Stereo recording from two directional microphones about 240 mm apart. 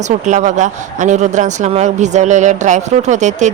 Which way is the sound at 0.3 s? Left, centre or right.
Right.